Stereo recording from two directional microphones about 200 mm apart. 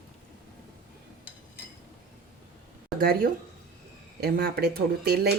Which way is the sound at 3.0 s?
50° right (ahead or behind).